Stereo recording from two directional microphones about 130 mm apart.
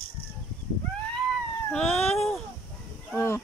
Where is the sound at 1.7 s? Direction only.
5° left (ahead or behind).